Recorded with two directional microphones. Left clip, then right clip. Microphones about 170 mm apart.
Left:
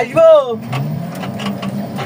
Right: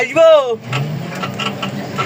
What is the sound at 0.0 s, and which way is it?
Speech, 10° right (ahead or behind).